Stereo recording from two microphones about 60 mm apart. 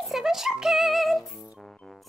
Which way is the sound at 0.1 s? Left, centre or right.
Centre.